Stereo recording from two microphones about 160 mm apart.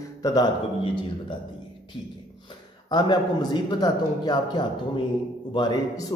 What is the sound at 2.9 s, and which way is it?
A man's voice, 25° left (ahead or behind).